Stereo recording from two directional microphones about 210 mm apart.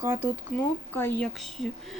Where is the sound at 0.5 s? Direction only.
10° left (ahead or behind).